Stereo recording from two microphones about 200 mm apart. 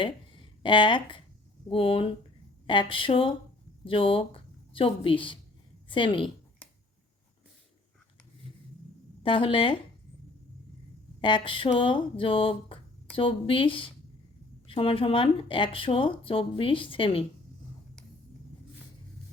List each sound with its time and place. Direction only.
0.0 s a woman's voice: 25° left (ahead or behind)
9.2 s speech: 25° left (ahead or behind)
11.2 s speech: 25° left (ahead or behind)